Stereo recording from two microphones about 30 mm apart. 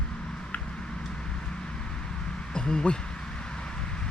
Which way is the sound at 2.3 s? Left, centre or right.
Left.